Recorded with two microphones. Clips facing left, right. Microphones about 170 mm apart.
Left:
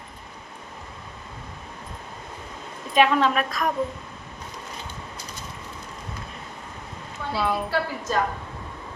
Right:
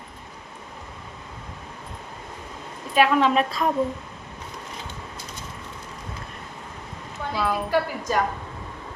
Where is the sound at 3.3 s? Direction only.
25° right (ahead or behind).